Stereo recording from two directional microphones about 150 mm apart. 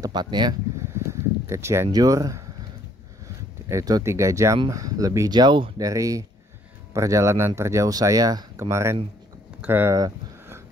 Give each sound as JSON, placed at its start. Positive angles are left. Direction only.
{"t": 0.0, "sound": "speech", "side_deg": -30}
{"t": 0.9, "sound": "speech", "side_deg": -20}
{"t": 3.6, "sound": "speech", "side_deg": -25}
{"t": 9.6, "sound": "a sound", "side_deg": -15}